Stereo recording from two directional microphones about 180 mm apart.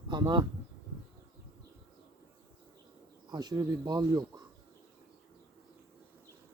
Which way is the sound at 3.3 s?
20° right (ahead or behind).